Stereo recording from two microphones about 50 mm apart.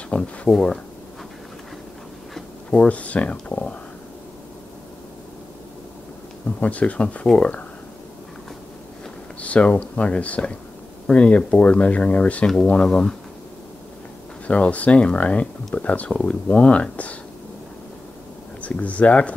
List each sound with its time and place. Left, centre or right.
0.2 s speech: centre
2.7 s speech: left
6.6 s speech: left
9.4 s speech: left
12.7 s speech: centre
14.5 s speech: left
18.6 s speech: left